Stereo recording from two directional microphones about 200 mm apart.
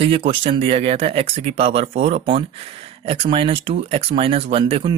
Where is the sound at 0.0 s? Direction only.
30° right (ahead or behind).